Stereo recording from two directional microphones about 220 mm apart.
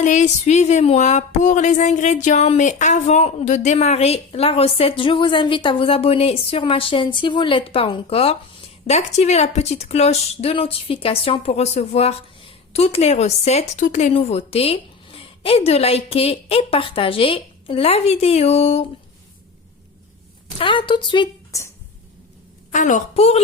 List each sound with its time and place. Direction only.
0.0 s speech: 35° left (ahead or behind)
20.6 s a woman's voice: 20° left (ahead or behind)
22.7 s a woman's voice: 35° left (ahead or behind)